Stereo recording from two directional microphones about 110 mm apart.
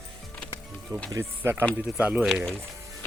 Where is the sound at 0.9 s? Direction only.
10° left (ahead or behind).